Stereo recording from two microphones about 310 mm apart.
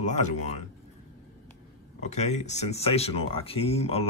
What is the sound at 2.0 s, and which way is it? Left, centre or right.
Speech, left.